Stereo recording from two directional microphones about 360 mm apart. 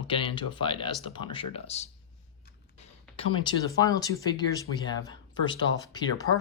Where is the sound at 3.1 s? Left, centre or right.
Centre.